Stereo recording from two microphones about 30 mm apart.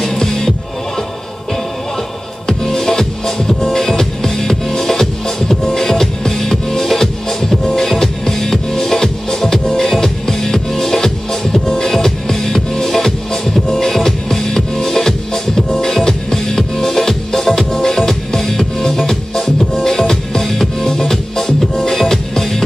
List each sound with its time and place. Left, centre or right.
0.0 s music: centre
2.4 s music: left